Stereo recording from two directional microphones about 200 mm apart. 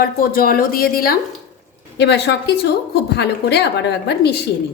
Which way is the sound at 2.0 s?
60° left (ahead or behind).